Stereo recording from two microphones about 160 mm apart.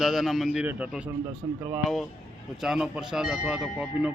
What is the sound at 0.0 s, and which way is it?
Speech, centre (ahead or behind).